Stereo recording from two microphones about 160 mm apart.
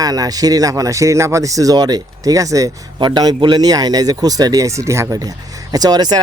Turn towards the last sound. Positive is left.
turn(degrees=-25)  # may be behind; listen again after turning